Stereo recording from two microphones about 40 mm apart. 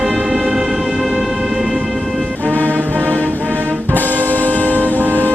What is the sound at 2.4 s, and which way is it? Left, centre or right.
Music, right.